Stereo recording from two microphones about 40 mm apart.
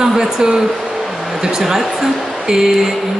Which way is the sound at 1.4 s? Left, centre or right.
Centre.